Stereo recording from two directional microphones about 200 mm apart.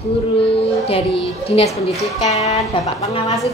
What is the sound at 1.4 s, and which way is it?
A woman's voice, 30° left (ahead or behind).